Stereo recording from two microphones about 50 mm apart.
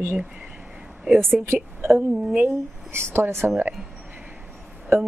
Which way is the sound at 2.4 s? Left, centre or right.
Right.